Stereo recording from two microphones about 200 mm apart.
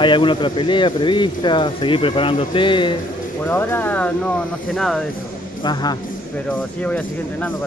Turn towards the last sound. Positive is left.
turn(degrees=10)  # may be behind; listen again after turning